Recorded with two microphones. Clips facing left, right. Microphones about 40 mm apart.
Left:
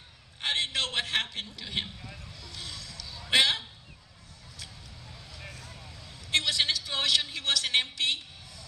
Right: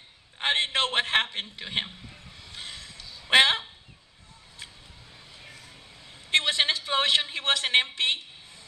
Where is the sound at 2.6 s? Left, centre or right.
Right.